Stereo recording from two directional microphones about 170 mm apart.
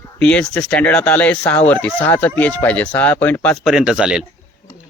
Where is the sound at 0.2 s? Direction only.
5° left (ahead or behind).